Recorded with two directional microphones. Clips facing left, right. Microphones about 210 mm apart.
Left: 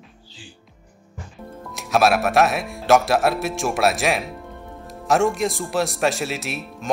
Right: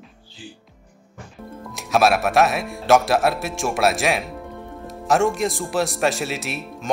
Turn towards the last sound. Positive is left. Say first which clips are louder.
# even
turn(degrees=0)  # may be behind; listen again after turning